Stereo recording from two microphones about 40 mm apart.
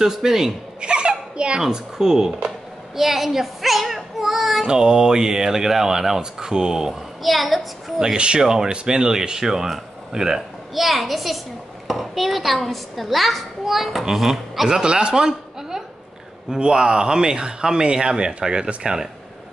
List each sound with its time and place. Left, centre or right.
0.0 s speech: centre
0.7 s a sound: right
1.6 s a child's voice: centre
4.6 s speech: centre
6.9 s a child's voice: centre
8.0 s speech: right
10.7 s a child's voice: centre
14.7 s speech: right